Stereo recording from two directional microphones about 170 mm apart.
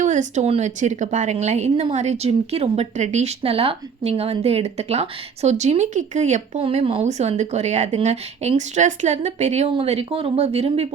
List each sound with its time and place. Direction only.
0.0 s a woman's voice: 45° right (ahead or behind)